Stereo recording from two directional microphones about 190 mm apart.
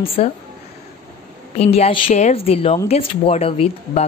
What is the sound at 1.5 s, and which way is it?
Speech, 35° left (ahead or behind).